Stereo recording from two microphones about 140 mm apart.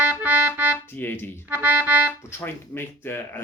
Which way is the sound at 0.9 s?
15° left (ahead or behind).